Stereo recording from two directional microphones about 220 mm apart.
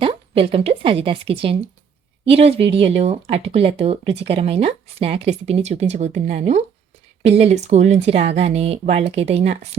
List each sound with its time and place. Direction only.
0.0 s a woman's voice: 25° right (ahead or behind)